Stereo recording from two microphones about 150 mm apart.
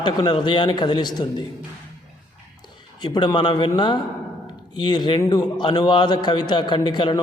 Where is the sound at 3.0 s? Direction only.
30° left (ahead or behind).